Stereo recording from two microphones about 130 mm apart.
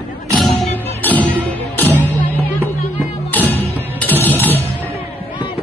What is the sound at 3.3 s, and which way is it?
Music, 15° left (ahead or behind).